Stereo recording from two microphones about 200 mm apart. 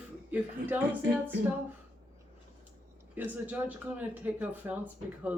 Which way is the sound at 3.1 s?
10° right (ahead or behind).